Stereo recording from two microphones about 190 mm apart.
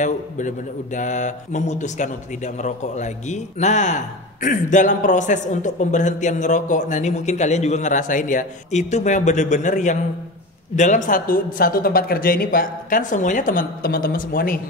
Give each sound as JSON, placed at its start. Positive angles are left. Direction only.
{"t": 0.0, "sound": "speech", "side_deg": 40}